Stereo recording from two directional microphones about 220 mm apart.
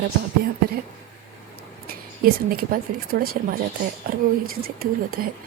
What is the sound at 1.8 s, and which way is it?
Speech, 40° right (ahead or behind).